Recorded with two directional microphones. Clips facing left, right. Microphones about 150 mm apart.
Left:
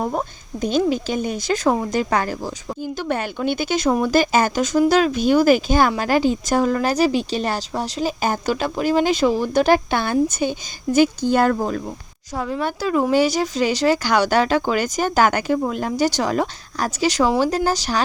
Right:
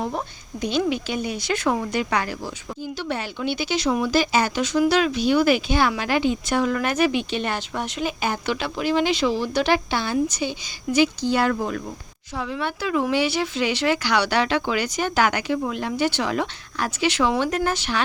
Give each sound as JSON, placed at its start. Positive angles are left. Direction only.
{"t": 0.0, "sound": "speech", "side_deg": 45}